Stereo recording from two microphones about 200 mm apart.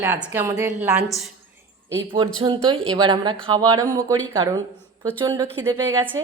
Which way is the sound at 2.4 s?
25° right (ahead or behind).